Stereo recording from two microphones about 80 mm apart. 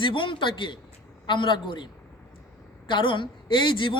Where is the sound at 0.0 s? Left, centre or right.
Left.